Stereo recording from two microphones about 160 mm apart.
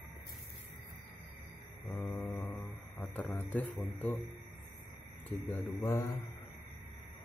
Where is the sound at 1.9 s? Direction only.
5° left (ahead or behind).